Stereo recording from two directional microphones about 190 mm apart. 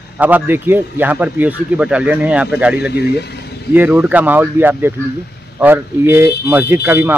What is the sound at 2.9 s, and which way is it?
Speech, 60° left (ahead or behind).